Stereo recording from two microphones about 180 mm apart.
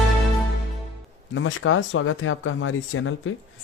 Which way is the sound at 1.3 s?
90° left.